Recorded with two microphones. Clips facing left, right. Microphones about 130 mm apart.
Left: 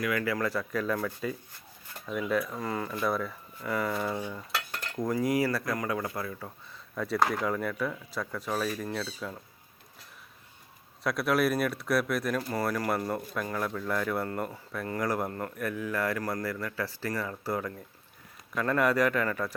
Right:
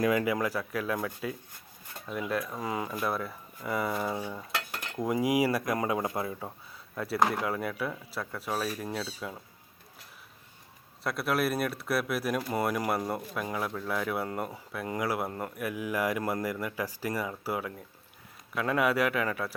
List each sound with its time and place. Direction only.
0.0 s speech: 20° right (ahead or behind)
6.9 s speech: 5° right (ahead or behind)
11.0 s speech: 5° right (ahead or behind)
12.4 s speech: 15° right (ahead or behind)